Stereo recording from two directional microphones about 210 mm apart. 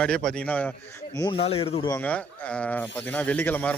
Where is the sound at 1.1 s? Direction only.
20° left (ahead or behind).